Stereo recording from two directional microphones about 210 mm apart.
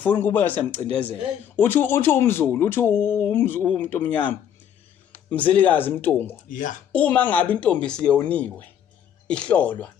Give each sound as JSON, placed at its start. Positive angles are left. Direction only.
{"t": 0.0, "sound": "speech", "side_deg": 10}
{"t": 6.5, "sound": "speech", "side_deg": 40}
{"t": 6.9, "sound": "speech", "side_deg": 5}